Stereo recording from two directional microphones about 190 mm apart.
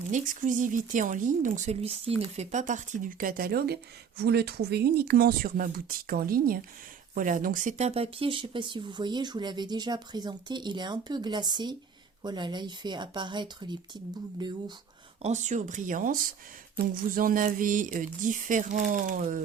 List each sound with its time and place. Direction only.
0.1 s speech: 45° right (ahead or behind); by 14.5 s 25° right (ahead or behind)
15.2 s speech: 35° right (ahead or behind)